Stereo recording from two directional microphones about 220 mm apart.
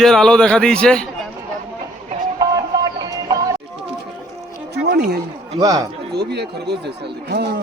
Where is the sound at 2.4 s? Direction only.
15° right (ahead or behind).